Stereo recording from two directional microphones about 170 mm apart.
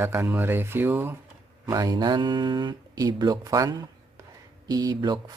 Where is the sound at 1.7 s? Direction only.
20° right (ahead or behind).